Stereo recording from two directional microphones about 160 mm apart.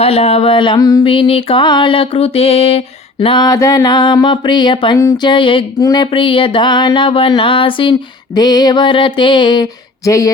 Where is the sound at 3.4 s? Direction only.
20° left (ahead or behind).